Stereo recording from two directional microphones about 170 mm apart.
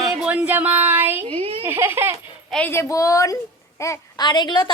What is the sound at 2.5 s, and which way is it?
A woman's voice, 10° left (ahead or behind).